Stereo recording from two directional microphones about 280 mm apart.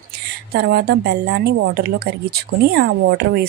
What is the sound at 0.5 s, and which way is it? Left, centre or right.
Speech, right.